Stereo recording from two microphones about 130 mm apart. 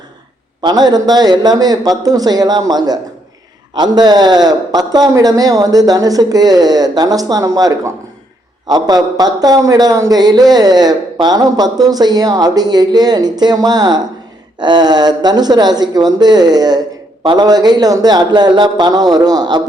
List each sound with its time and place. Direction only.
0.6 s speech: 30° right (ahead or behind)